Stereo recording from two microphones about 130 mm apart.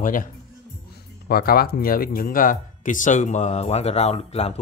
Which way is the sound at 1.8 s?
90° left.